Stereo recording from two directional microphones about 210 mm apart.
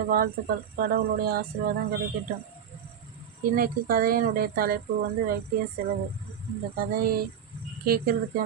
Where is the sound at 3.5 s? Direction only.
45° right (ahead or behind).